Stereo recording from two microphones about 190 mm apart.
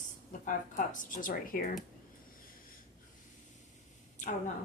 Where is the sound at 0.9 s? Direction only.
45° left (ahead or behind).